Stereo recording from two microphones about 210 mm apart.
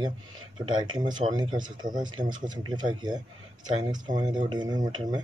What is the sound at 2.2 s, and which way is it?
Speech, 40° right (ahead or behind).